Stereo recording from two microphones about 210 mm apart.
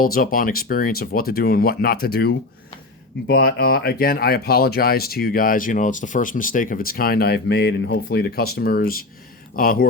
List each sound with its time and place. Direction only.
0.0 s speech: 45° left (ahead or behind)